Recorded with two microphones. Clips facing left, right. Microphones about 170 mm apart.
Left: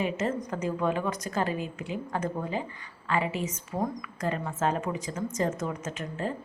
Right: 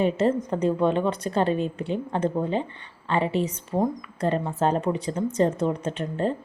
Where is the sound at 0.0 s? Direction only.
30° right (ahead or behind).